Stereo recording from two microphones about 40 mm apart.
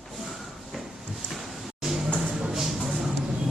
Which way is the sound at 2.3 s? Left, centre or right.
Right.